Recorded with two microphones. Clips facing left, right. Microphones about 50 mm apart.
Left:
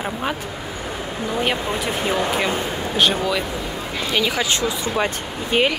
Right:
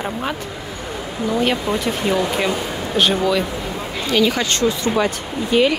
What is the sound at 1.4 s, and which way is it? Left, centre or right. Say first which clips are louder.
Speech: right 3 dB; centre.